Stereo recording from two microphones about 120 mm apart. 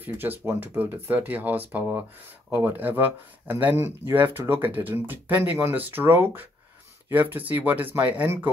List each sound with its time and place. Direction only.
0.0 s speech: 15° right (ahead or behind)